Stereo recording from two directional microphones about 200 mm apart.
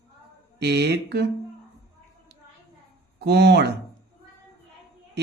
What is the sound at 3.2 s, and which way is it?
Speech, 55° right (ahead or behind).